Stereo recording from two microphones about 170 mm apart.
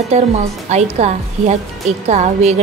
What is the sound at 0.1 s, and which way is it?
A woman's voice, 40° right (ahead or behind).